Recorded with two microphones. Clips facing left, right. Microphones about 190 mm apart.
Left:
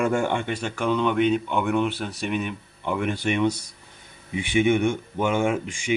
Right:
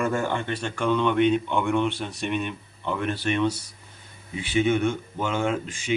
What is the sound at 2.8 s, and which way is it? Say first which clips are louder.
Speech: left 2 dB; 15° left (ahead or behind).